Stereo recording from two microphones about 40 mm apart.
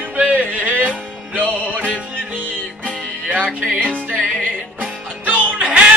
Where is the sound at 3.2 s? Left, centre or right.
Right.